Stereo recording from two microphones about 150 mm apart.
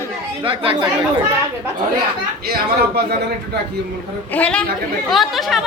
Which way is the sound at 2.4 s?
90° right.